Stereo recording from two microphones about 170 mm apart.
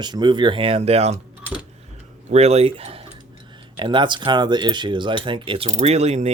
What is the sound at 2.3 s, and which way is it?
Speech, 40° right (ahead or behind).